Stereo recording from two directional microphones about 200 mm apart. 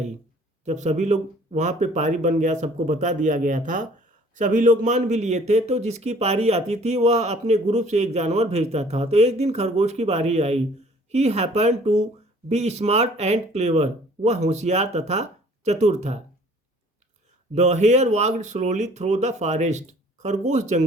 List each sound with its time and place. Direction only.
0.6 s a man's voice: 35° right (ahead or behind)
17.5 s a man's voice: 35° right (ahead or behind)